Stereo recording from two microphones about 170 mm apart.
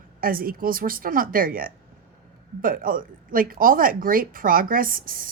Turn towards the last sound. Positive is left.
turn(degrees=-55)  # may be behind; listen again after turning